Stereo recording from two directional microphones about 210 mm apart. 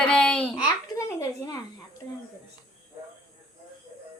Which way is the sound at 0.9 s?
15° left (ahead or behind).